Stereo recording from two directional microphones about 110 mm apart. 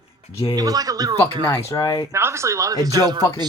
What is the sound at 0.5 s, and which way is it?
Speech, 35° right (ahead or behind).